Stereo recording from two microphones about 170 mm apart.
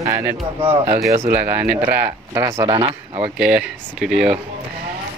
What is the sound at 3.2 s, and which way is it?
Speech, 5° right (ahead or behind).